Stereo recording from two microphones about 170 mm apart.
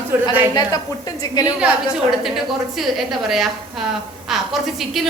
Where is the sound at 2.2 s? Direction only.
Centre (ahead or behind).